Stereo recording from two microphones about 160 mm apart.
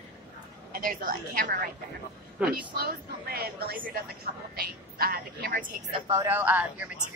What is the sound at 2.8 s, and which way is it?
A woman's voice, 70° right (ahead or behind).